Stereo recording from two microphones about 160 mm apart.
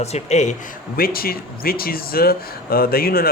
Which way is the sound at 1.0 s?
70° left (ahead or behind).